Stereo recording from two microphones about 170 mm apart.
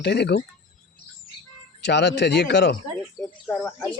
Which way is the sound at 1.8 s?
90° left.